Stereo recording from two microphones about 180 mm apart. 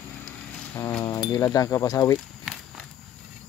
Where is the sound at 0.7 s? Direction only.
15° left (ahead or behind).